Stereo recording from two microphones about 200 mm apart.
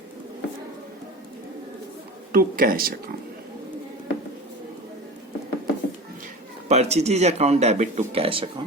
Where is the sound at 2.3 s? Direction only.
45° right (ahead or behind).